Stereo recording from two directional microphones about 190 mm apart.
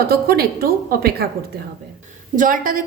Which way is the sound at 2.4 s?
45° right (ahead or behind).